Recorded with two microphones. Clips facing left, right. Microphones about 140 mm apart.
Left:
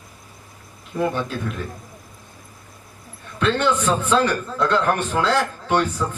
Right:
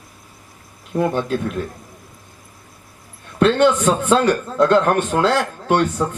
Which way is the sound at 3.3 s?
50° right (ahead or behind).